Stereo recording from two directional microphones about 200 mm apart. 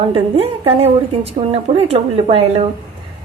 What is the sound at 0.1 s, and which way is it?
A woman's voice, 30° right (ahead or behind).